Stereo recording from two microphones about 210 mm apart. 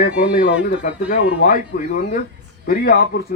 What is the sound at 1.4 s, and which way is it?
Speech, 40° left (ahead or behind).